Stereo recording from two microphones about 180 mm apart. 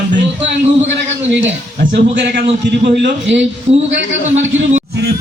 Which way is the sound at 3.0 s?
85° right.